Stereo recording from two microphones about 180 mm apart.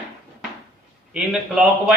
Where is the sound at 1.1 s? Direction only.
5° right (ahead or behind).